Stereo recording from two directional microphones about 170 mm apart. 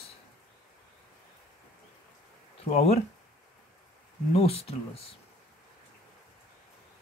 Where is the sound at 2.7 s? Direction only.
40° left (ahead or behind).